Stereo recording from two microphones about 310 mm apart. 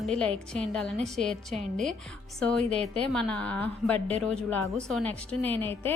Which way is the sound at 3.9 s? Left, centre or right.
Centre.